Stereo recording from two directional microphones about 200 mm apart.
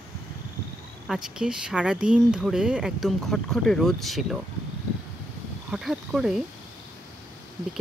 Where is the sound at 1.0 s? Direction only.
Centre (ahead or behind).